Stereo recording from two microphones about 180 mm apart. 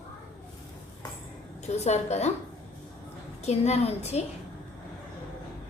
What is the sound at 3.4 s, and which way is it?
Speech, 35° left (ahead or behind).